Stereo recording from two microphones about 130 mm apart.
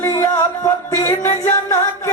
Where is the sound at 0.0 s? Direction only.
20° left (ahead or behind).